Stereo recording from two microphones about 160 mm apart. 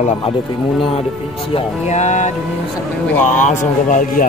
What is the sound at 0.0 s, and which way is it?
Speech, 40° left (ahead or behind).